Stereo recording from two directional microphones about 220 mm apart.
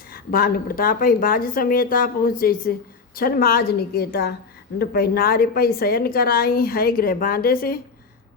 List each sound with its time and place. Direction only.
0.1 s a woman's voice: 40° left (ahead or behind)